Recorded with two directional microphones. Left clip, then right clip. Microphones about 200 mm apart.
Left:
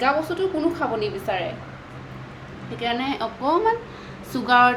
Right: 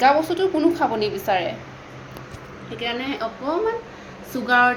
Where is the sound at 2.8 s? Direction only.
15° left (ahead or behind).